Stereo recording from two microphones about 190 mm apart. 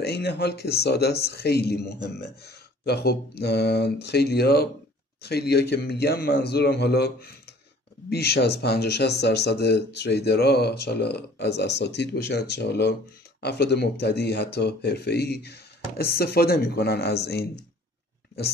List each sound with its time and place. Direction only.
0.0 s speech: 60° left (ahead or behind)